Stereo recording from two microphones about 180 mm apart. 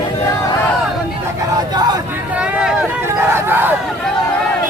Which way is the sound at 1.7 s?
20° right (ahead or behind).